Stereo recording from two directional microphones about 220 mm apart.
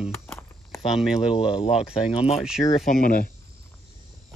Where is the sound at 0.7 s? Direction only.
Centre (ahead or behind).